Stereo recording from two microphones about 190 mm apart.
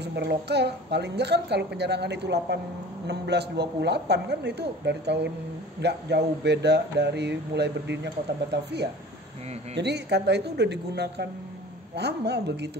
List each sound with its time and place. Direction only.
0.0 s a woman's voice: 60° right (ahead or behind)
9.8 s a woman's voice: 65° right (ahead or behind)